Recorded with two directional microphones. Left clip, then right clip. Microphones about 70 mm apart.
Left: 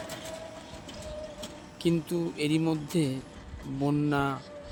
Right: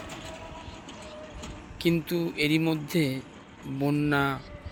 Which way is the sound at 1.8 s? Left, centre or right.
Centre.